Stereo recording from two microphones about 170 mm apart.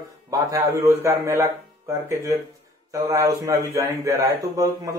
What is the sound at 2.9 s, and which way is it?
A man's voice, 20° right (ahead or behind).